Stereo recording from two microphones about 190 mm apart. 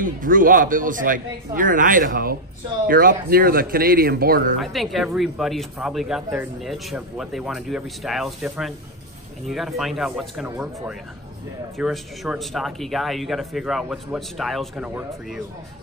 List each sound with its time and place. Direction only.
0.0 s speech: 45° right (ahead or behind)
4.6 s speech: centre (ahead or behind)